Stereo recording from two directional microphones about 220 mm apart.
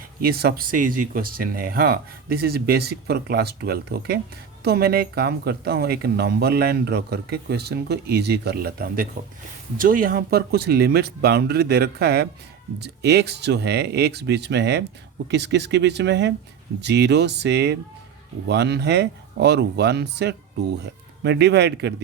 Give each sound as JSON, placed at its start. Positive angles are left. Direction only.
{"t": 0.2, "sound": "speech", "side_deg": -45}